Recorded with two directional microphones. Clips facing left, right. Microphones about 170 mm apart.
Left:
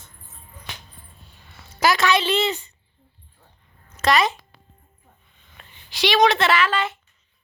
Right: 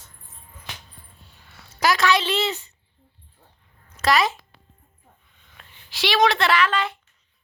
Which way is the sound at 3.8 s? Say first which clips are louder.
Left 1 dB; centre (ahead or behind).